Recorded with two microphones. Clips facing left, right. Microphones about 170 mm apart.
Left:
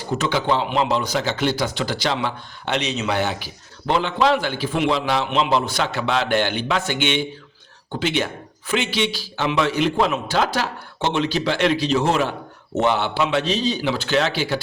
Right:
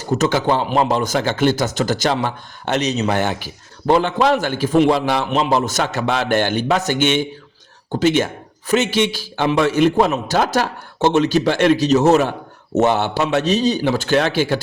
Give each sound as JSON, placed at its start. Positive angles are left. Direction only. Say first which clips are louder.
{"t": 0.0, "sound": "a man's voice", "louder": "right 5 dB", "side_deg": -45}